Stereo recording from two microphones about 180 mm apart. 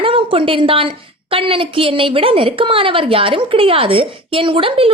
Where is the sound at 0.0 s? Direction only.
30° right (ahead or behind).